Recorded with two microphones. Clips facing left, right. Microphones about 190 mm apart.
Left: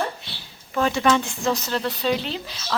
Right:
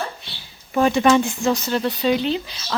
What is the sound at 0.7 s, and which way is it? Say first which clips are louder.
Speech: right 4 dB; 20° right (ahead or behind).